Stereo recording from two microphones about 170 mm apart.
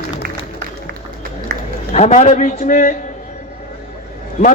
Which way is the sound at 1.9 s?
40° left (ahead or behind).